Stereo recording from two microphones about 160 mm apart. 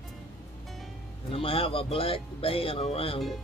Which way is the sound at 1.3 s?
35° left (ahead or behind).